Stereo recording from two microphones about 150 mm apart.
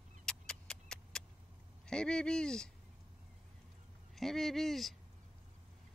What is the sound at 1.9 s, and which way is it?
Speech, 5° left (ahead or behind).